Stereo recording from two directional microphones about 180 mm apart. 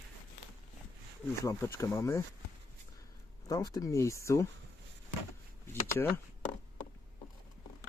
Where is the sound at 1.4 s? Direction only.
15° left (ahead or behind).